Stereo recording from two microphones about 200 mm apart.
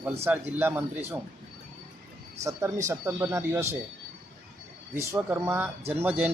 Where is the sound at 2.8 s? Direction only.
15° right (ahead or behind).